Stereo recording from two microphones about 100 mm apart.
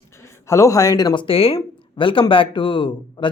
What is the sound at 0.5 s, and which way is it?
Speech, 35° left (ahead or behind).